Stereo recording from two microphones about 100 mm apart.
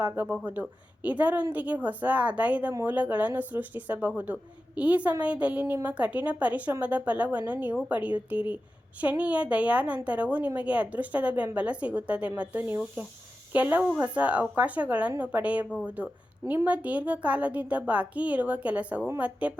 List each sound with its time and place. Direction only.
0.0 s a woman's voice: 20° right (ahead or behind)